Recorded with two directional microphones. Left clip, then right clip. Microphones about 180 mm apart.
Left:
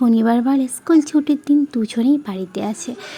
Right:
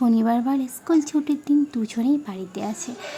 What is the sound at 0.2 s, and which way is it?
A woman's voice, 20° left (ahead or behind).